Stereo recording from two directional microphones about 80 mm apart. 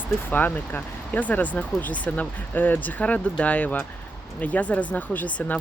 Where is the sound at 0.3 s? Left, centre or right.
Left.